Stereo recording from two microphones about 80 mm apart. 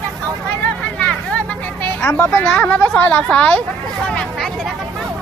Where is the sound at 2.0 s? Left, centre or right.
Left.